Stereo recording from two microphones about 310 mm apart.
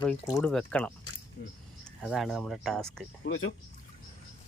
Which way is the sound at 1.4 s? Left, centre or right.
Left.